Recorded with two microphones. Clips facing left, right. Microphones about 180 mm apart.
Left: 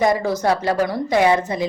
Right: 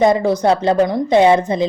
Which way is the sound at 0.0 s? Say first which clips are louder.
Right 5 dB; 25° right (ahead or behind).